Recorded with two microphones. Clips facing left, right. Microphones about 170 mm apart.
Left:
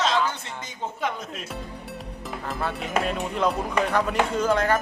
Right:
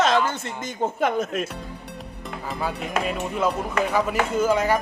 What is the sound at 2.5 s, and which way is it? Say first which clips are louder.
Speech: even; centre (ahead or behind).